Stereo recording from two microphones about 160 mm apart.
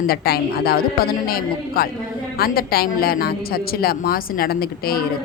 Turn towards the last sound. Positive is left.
turn(degrees=70)  # may be behind; listen again after turning